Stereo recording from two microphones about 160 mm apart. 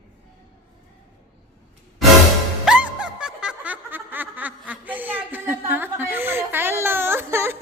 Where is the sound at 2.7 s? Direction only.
5° right (ahead or behind).